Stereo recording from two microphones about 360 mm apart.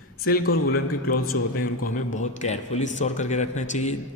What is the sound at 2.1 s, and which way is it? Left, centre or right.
A man's voice, centre.